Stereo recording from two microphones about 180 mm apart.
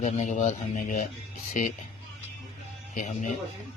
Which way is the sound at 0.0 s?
40° left (ahead or behind).